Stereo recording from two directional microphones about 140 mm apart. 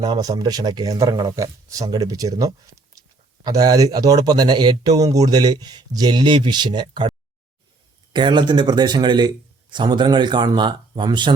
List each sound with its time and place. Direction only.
0.0 s speech: 30° right (ahead or behind)
2.9 s a sound: 25° right (ahead or behind)
3.4 s a man's voice: 25° right (ahead or behind)